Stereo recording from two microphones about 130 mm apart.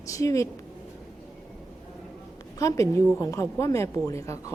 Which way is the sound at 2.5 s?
25° left (ahead or behind).